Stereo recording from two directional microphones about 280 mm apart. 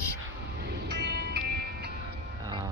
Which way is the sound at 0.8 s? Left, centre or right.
Right.